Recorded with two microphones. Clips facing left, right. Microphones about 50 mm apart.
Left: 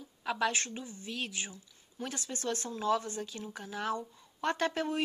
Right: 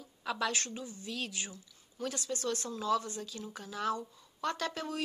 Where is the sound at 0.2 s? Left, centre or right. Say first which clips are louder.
Left 2 dB; centre.